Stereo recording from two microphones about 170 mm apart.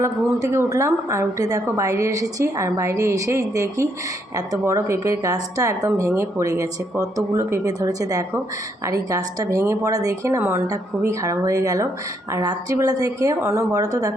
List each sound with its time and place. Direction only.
0.0 s a woman's voice: 20° right (ahead or behind)